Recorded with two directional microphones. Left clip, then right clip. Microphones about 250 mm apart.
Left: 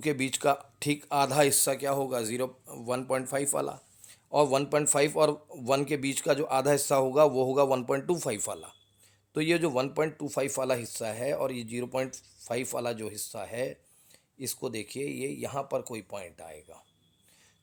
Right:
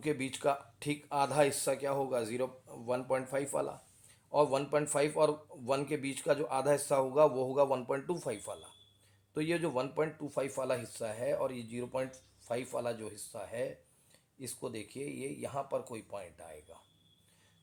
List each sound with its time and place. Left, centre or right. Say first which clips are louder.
0.0 s speech: left 5 dB; left